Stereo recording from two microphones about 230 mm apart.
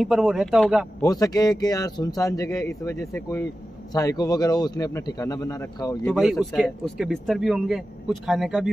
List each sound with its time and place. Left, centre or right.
0.0 s a man's voice: centre
1.0 s speech: centre
6.0 s a man's voice: centre